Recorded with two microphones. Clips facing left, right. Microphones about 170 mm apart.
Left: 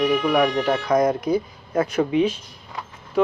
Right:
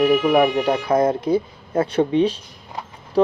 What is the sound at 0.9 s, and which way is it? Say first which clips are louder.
Speech: right 1 dB; 30° right (ahead or behind).